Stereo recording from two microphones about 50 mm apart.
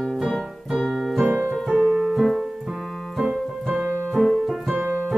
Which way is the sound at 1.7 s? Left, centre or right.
Centre.